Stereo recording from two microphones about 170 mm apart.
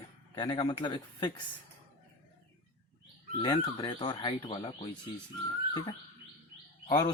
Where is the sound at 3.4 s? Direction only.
30° left (ahead or behind).